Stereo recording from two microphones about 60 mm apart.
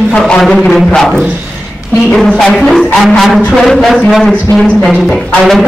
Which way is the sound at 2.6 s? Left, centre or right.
Centre.